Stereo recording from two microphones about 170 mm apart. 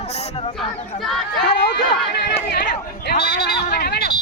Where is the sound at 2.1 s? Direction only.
70° left (ahead or behind).